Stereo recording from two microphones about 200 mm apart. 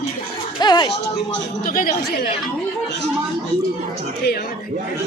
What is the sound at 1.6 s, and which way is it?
Speech, 45° left (ahead or behind).